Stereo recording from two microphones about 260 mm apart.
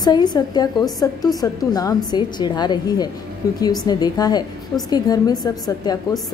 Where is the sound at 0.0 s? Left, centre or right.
Centre.